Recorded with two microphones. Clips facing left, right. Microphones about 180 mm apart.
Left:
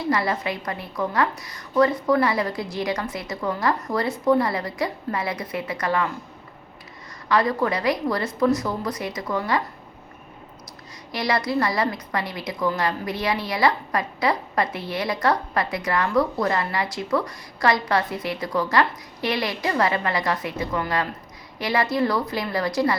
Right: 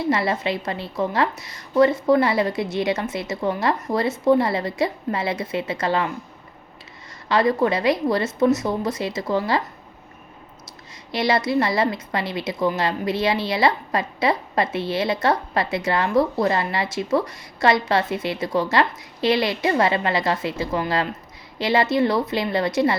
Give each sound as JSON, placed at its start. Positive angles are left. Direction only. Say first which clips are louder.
{"t": 0.0, "sound": "a woman's voice", "louder": "right 2 dB", "side_deg": -25}
{"t": 7.3, "sound": "a woman's voice", "louder": "right 3 dB", "side_deg": -25}
{"t": 11.1, "sound": "a woman's voice", "louder": "right 3 dB", "side_deg": -25}